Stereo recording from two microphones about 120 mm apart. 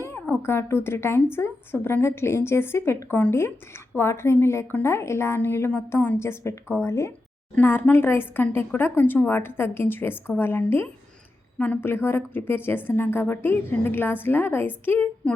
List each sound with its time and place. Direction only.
0.0 s a woman's voice: 20° left (ahead or behind)